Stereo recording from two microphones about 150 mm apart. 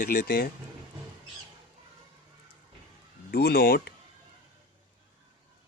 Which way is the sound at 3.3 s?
90° left.